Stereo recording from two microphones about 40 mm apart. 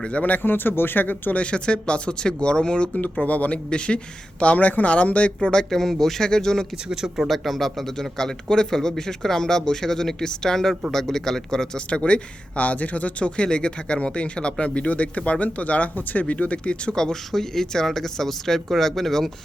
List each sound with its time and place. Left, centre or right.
0.0 s speech: left
1.4 s speech: left
3.0 s speech: left
3.7 s speech: left
4.5 s speech: left
5.7 s a man's voice: centre
6.8 s speech: centre
7.3 s a man's voice: centre
11.9 s speech: left
16.9 s a man's voice: centre